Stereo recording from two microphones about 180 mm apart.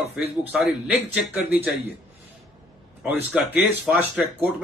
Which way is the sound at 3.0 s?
10° right (ahead or behind).